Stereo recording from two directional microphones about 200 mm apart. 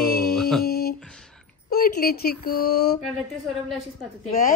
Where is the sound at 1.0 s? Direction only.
5° left (ahead or behind).